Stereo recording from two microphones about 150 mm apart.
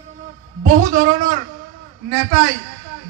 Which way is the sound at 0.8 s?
60° right (ahead or behind).